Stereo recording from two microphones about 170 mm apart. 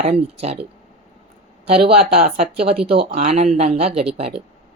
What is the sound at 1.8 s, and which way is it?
A woman's voice, 40° right (ahead or behind).